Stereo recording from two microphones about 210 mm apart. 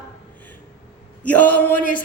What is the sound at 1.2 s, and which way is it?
Speech, 5° left (ahead or behind).